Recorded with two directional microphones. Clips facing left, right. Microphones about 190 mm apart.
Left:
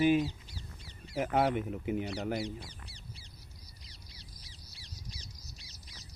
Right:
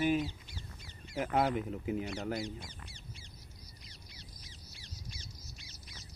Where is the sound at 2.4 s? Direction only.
35° left (ahead or behind).